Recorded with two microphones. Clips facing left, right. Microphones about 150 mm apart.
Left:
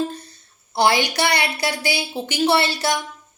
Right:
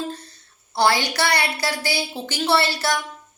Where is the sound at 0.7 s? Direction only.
15° left (ahead or behind).